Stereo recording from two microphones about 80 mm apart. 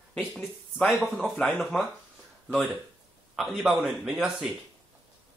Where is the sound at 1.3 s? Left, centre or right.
Centre.